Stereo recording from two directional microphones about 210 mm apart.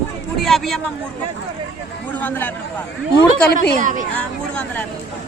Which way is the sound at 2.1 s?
10° left (ahead or behind).